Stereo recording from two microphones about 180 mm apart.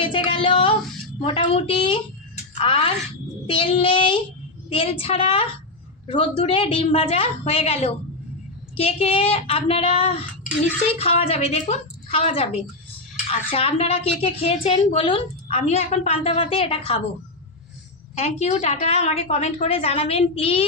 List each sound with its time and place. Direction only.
0.3 s a sound: 30° left (ahead or behind)
1.2 s a woman's voice: 30° left (ahead or behind)
18.1 s speech: 40° left (ahead or behind)